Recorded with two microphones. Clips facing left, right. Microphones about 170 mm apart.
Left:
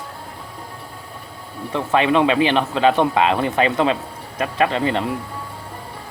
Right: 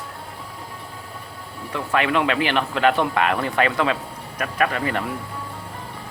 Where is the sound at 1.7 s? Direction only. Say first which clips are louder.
Left 4 dB; 20° left (ahead or behind).